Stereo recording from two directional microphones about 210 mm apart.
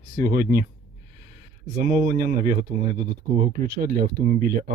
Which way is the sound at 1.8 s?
40° right (ahead or behind).